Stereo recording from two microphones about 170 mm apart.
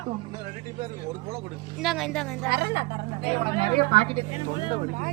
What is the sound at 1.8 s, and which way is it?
Speech, centre (ahead or behind).